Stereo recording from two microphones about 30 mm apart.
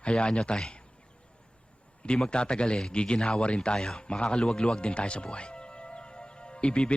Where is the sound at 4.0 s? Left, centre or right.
Left.